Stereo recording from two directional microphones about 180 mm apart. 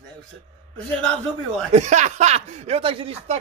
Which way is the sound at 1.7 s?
40° right (ahead or behind).